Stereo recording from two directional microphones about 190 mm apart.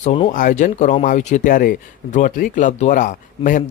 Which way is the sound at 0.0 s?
35° left (ahead or behind).